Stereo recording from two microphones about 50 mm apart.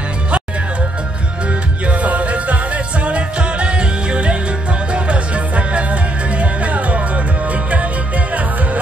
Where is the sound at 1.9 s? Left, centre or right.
Right.